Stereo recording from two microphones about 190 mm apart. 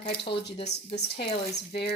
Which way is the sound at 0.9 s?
60° left (ahead or behind).